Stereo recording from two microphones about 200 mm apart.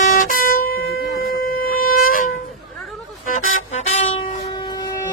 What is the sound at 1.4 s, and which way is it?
Wind instrument, 45° left (ahead or behind).